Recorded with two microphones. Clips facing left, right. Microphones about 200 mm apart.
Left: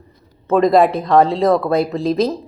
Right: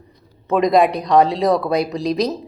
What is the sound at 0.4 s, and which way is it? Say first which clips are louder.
Speech: left 2 dB; 15° right (ahead or behind).